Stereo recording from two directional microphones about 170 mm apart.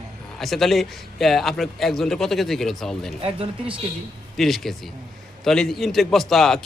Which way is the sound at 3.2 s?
35° right (ahead or behind).